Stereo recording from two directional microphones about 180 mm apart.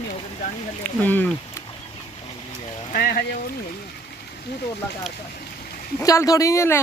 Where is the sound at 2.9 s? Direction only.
60° left (ahead or behind).